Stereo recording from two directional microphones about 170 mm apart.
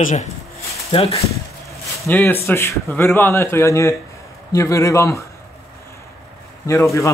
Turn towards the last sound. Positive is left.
turn(degrees=15)  # may be behind; listen again after turning